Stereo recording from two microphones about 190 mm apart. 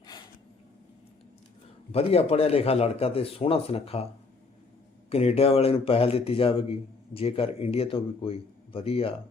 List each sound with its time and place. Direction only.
1.9 s speech: 30° left (ahead or behind)
5.0 s speech: 35° left (ahead or behind)